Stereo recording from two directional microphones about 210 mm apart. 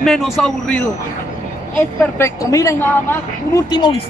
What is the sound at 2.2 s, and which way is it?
Speech, 15° left (ahead or behind).